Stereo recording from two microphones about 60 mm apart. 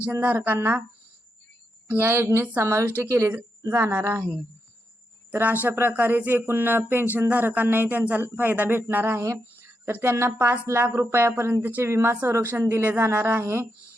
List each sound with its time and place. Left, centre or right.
0.2 s speech: right
1.9 s a woman's voice: right
5.3 s speech: right
9.0 s a woman's voice: right
9.6 s a woman's voice: right